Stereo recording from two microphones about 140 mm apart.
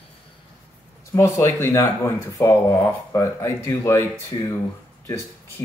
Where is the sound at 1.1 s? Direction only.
20° left (ahead or behind).